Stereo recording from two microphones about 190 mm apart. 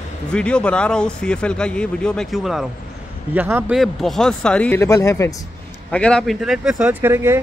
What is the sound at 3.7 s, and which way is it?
Speech, centre (ahead or behind).